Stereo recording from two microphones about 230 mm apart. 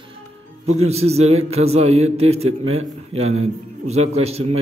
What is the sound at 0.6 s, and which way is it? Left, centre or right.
A man's voice, right.